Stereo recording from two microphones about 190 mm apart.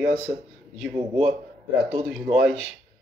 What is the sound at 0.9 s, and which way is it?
Speech, 5° right (ahead or behind).